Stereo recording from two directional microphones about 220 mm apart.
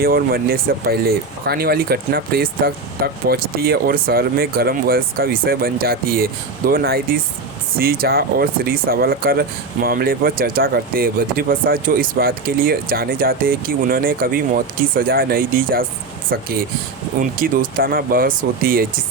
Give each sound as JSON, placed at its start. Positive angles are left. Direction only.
{"t": 0.0, "sound": "speech", "side_deg": -40}